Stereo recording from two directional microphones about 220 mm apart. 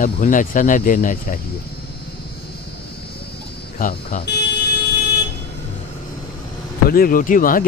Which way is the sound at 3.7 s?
40° left (ahead or behind).